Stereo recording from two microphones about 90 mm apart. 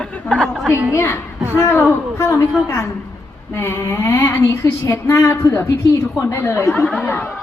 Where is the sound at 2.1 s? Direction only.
30° left (ahead or behind).